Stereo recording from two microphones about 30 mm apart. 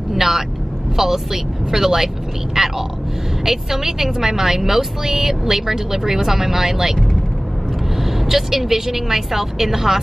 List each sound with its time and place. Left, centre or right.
0.1 s vehicle: centre
0.9 s speech: centre
8.0 s speech: centre